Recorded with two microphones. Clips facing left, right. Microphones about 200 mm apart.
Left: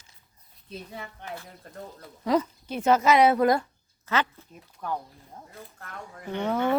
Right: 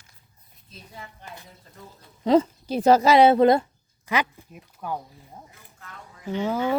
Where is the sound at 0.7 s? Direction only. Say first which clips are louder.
Left 5 dB; 65° left (ahead or behind).